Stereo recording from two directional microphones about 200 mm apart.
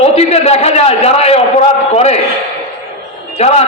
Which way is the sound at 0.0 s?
30° left (ahead or behind).